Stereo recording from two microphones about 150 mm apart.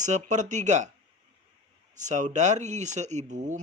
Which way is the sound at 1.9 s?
55° right (ahead or behind).